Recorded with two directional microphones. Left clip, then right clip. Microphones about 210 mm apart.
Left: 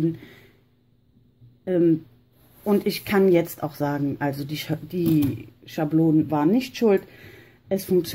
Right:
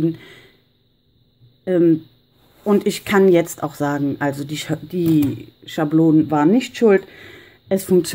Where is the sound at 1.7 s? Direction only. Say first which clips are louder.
Right 5 dB; 10° right (ahead or behind).